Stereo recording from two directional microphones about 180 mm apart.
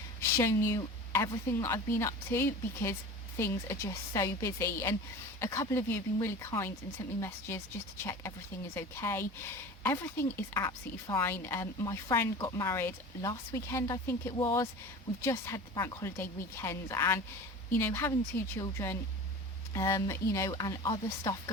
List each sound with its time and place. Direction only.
0.2 s a woman's voice: 15° left (ahead or behind)
8.7 s a woman's voice: 15° left (ahead or behind)